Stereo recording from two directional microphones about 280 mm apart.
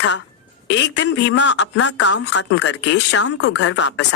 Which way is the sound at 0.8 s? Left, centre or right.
Left.